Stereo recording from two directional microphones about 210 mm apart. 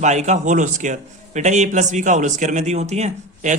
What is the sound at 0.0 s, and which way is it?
A man's voice, 35° right (ahead or behind).